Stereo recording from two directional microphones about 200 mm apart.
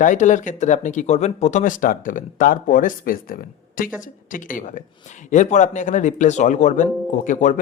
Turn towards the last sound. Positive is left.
turn(degrees=40)  # may be behind; listen again after turning